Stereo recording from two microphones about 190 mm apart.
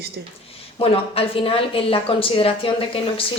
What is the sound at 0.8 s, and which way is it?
Speech, 30° left (ahead or behind).